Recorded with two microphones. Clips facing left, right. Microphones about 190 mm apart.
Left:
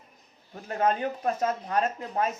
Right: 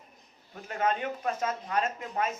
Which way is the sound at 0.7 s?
40° left (ahead or behind).